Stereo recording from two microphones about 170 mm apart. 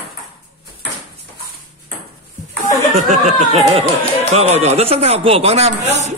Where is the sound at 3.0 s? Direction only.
45° right (ahead or behind).